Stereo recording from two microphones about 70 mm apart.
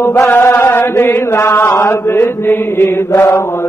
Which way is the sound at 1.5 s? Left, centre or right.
Left.